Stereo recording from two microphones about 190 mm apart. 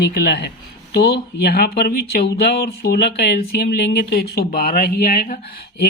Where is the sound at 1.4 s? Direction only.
55° left (ahead or behind).